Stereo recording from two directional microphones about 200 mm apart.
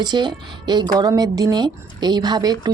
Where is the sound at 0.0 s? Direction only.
20° right (ahead or behind).